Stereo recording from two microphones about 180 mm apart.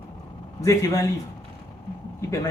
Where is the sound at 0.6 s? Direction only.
15° left (ahead or behind).